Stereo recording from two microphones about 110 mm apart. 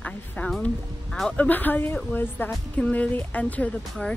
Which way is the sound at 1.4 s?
15° left (ahead or behind).